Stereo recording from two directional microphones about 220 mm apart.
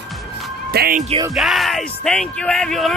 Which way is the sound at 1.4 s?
Centre (ahead or behind).